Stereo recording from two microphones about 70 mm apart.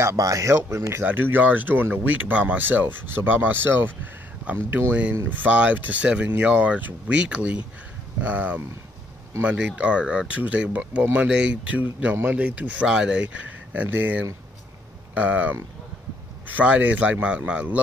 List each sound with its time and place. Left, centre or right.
0.0 s speech: right
1.0 s speech: right
5.4 s speech: right
13.4 s speech: right